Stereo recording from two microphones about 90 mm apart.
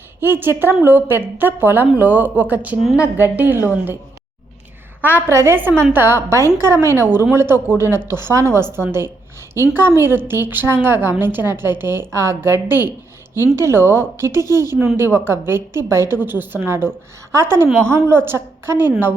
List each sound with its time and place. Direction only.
0.2 s a woman's voice: 25° right (ahead or behind)
5.3 s a woman's voice: 30° right (ahead or behind)